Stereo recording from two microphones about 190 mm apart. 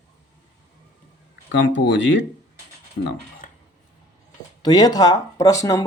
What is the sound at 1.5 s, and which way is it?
Speech, 65° left (ahead or behind).